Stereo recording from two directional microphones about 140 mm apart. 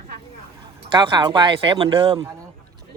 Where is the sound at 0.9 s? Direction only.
35° right (ahead or behind).